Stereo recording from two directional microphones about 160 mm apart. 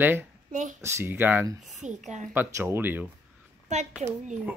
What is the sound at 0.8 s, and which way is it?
Speech, 15° right (ahead or behind).